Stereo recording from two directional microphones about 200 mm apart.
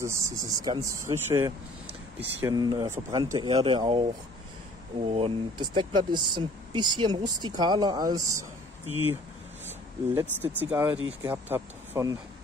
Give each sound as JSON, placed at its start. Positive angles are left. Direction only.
{"t": 0.0, "sound": "speech", "side_deg": -15}
{"t": 9.7, "sound": "speech", "side_deg": -10}